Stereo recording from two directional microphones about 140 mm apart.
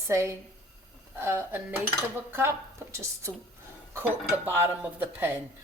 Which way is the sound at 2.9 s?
20° right (ahead or behind).